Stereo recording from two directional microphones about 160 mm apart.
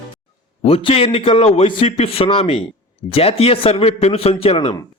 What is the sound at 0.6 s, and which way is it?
A man's voice, 35° left (ahead or behind).